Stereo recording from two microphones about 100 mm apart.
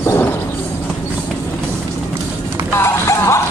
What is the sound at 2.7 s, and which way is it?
Music, 30° left (ahead or behind).